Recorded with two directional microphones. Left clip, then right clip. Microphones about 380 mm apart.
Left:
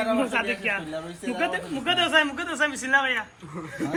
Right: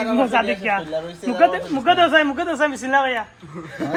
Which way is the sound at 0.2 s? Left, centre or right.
Centre.